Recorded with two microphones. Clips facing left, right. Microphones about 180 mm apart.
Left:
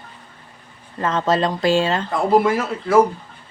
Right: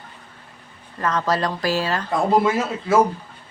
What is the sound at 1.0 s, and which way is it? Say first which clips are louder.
A woman's voice: left 3 dB; 25° left (ahead or behind).